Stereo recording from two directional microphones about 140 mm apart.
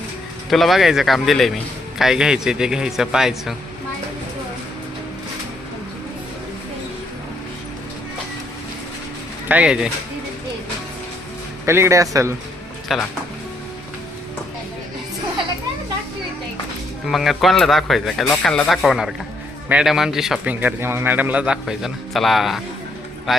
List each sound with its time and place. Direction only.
0.5 s a man's voice: centre (ahead or behind)
9.5 s speech: 10° right (ahead or behind)
11.6 s a man's voice: 20° right (ahead or behind)
12.9 s a man's voice: centre (ahead or behind)
17.1 s a man's voice: centre (ahead or behind)